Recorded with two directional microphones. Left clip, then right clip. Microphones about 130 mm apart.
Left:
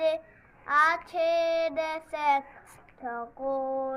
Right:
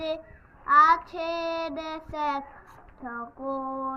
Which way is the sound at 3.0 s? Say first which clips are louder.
Left 1 dB; 30° left (ahead or behind).